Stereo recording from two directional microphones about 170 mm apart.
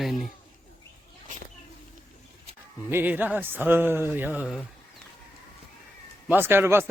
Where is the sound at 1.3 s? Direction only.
50° right (ahead or behind).